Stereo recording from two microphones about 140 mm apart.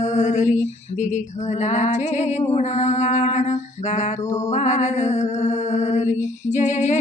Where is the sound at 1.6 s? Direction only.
55° left (ahead or behind).